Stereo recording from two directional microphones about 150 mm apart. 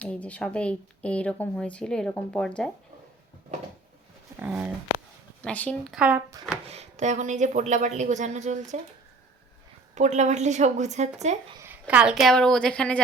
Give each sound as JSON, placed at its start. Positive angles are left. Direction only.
{"t": 0.0, "sound": "speech", "side_deg": 10}
{"t": 4.4, "sound": "speech", "side_deg": -10}
{"t": 5.4, "sound": "speech", "side_deg": 10}
{"t": 5.9, "sound": "speech", "side_deg": -10}
{"t": 6.7, "sound": "speech", "side_deg": -50}
{"t": 9.9, "sound": "speech", "side_deg": -50}
{"t": 11.6, "sound": "a woman's voice", "side_deg": -10}